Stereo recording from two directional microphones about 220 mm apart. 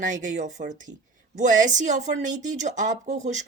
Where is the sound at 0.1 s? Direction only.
35° right (ahead or behind).